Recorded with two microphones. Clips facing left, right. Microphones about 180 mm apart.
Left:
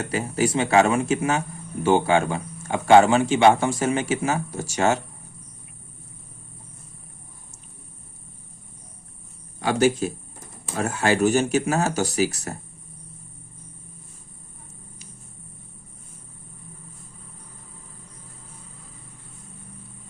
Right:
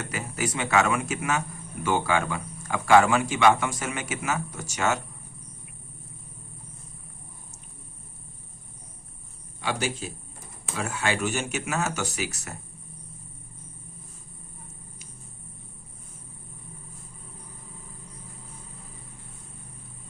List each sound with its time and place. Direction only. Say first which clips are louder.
0.0 s a man's voice: left 7 dB; 30° left (ahead or behind)
9.6 s speech: left 10 dB; 45° left (ahead or behind)